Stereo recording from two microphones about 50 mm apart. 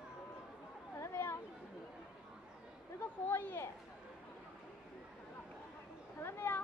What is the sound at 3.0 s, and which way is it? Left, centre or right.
Speech, left.